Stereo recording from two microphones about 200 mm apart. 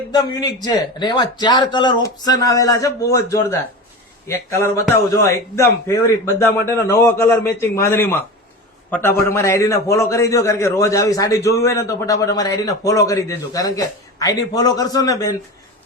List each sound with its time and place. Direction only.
0.1 s a man's voice: 20° left (ahead or behind)